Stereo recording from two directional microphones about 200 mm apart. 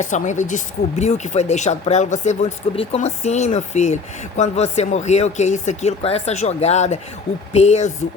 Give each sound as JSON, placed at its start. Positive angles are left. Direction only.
{"t": 0.0, "sound": "speech", "side_deg": 35}